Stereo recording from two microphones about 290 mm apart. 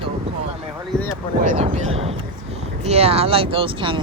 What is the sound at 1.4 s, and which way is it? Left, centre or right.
Speech, right.